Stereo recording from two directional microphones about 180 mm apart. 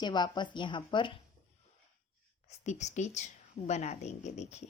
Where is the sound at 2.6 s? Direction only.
40° left (ahead or behind).